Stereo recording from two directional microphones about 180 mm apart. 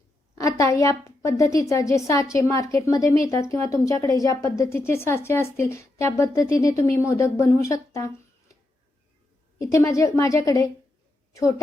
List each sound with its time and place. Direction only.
0.3 s a woman's voice: 15° left (ahead or behind)
9.6 s a woman's voice: 15° left (ahead or behind)